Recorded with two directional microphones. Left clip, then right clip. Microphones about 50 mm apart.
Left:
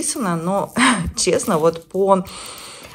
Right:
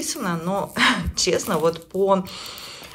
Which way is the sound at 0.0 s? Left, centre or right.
Right.